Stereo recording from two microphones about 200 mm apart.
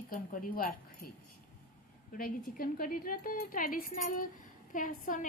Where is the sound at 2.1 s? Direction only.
45° left (ahead or behind).